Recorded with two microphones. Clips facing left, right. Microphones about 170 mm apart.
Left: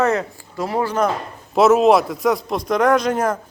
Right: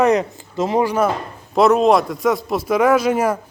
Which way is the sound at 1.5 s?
5° left (ahead or behind).